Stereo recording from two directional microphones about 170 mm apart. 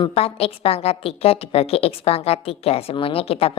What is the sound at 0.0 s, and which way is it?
Speech, 35° left (ahead or behind).